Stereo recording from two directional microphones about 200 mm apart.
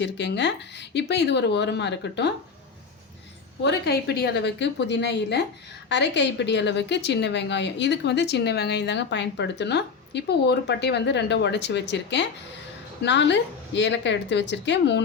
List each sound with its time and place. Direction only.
0.0 s a woman's voice: 60° left (ahead or behind)
3.6 s a woman's voice: 55° left (ahead or behind)